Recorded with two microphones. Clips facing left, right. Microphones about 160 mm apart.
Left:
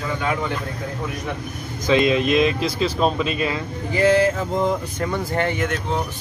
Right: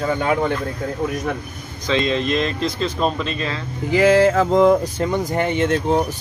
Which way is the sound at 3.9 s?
90° right.